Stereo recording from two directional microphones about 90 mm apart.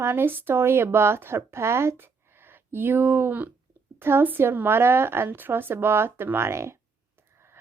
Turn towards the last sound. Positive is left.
turn(degrees=-30)  # may be behind; listen again after turning